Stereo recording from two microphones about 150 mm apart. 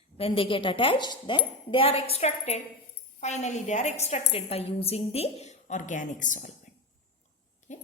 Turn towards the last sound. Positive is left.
turn(degrees=55)  # may be behind; listen again after turning